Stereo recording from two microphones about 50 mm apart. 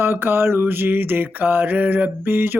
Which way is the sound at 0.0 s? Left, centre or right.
Right.